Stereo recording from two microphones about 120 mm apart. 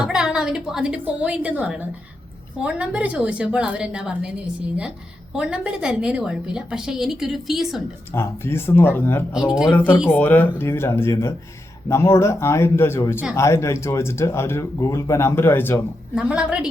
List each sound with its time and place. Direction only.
0.0 s a woman's voice: 5° right (ahead or behind)
5.3 s a woman's voice: 10° right (ahead or behind)
8.1 s speech: 20° left (ahead or behind)
9.5 s a woman's voice: 5° right (ahead or behind)
9.7 s speech: 15° left (ahead or behind)
16.1 s a woman's voice: 10° right (ahead or behind)